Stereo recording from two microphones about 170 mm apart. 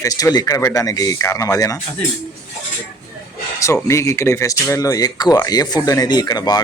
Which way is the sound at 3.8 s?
15° left (ahead or behind).